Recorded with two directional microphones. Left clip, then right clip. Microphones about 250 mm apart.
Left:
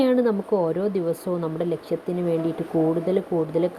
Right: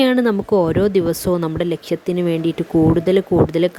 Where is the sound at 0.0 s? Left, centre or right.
Right.